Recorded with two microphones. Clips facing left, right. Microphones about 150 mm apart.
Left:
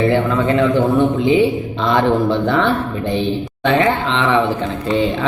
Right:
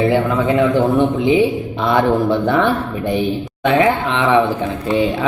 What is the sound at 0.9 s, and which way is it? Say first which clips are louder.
A man's voice: even; 15° right (ahead or behind).